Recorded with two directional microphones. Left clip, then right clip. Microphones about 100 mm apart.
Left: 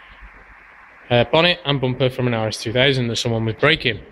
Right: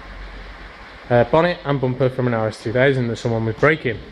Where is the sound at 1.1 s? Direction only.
25° left (ahead or behind).